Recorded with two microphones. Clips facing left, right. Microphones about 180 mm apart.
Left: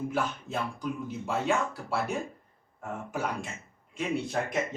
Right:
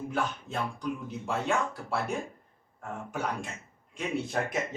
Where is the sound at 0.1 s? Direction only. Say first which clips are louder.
Left 1 dB; centre (ahead or behind).